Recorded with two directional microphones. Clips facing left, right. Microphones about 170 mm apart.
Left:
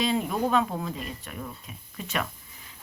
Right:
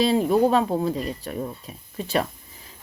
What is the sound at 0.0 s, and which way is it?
Speech, 35° right (ahead or behind).